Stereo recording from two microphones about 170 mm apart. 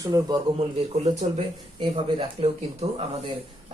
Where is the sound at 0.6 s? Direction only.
35° right (ahead or behind).